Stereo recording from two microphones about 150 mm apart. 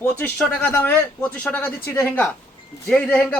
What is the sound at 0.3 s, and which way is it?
A man's voice, 5° left (ahead or behind).